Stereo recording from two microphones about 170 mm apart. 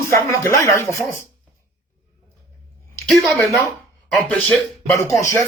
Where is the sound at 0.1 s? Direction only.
15° left (ahead or behind).